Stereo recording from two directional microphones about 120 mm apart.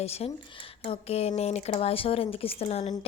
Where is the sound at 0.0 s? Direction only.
60° left (ahead or behind).